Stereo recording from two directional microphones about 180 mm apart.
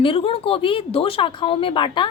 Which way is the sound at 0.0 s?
30° left (ahead or behind).